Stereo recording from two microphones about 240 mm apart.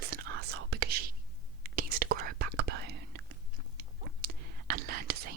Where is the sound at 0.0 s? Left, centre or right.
Right.